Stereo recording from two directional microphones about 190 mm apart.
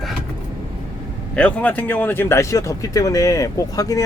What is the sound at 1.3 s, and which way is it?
Speech, 5° left (ahead or behind).